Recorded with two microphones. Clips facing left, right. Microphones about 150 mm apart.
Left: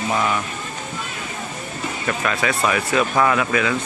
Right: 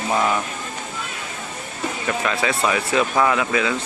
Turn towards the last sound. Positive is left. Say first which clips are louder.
# left 1 dB
turn(degrees=-20)  # may be behind; listen again after turning